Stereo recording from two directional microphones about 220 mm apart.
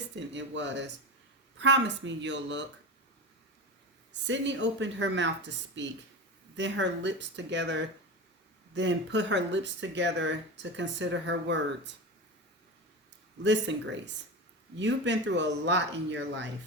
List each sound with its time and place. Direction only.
0.2 s speech: 55° right (ahead or behind)
4.1 s speech: 55° right (ahead or behind)
13.4 s speech: 55° right (ahead or behind)